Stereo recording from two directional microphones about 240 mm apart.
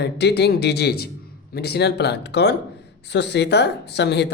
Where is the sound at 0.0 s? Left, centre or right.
Left.